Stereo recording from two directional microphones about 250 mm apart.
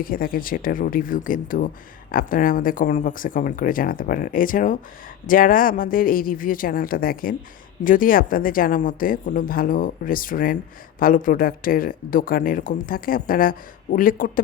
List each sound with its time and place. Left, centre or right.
0.0 s speech: left